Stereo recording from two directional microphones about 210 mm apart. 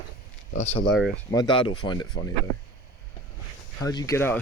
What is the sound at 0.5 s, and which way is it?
Speech, 30° left (ahead or behind).